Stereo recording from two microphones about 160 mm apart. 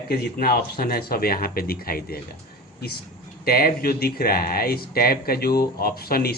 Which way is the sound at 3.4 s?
65° left (ahead or behind).